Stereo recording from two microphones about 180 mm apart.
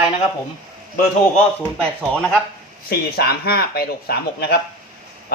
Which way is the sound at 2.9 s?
60° left (ahead or behind).